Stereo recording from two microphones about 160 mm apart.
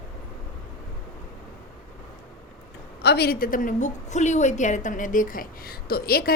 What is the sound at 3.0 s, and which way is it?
A woman's voice, 90° left.